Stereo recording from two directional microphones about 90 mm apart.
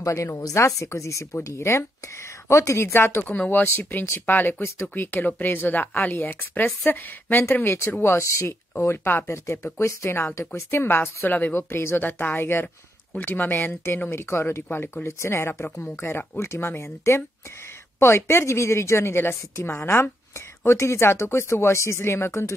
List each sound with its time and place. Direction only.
0.0 s speech: 35° left (ahead or behind)